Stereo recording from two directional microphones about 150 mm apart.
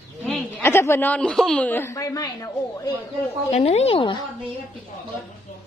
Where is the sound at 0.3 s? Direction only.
15° left (ahead or behind).